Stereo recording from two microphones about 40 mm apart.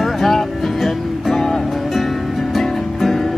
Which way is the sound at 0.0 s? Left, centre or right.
Centre.